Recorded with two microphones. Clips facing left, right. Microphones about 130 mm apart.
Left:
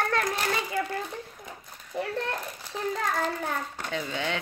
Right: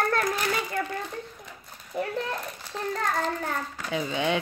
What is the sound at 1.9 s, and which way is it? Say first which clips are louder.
A child's voice: right 1 dB; centre (ahead or behind).